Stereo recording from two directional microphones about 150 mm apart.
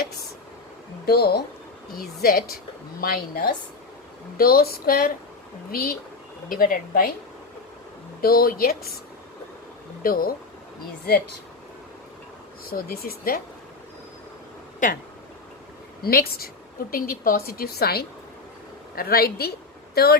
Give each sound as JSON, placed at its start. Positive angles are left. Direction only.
{"t": 1.0, "sound": "a woman's voice", "side_deg": 90}
{"t": 6.5, "sound": "a woman's voice", "side_deg": 70}
{"t": 8.2, "sound": "a woman's voice", "side_deg": 80}
{"t": 10.0, "sound": "a woman's voice", "side_deg": 75}
{"t": 12.7, "sound": "a woman's voice", "side_deg": 90}
{"t": 16.0, "sound": "a woman's voice", "side_deg": 90}
{"t": 16.9, "sound": "a woman's voice", "side_deg": 70}